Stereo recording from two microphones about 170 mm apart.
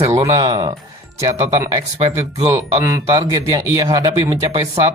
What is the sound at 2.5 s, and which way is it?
Speech, 20° right (ahead or behind).